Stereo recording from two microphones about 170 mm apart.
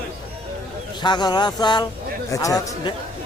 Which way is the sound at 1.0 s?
25° left (ahead or behind).